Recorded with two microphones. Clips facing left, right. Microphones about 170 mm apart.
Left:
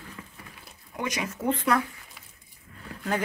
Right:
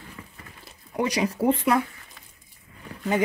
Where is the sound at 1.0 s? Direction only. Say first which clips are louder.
Right 6 dB; 35° right (ahead or behind).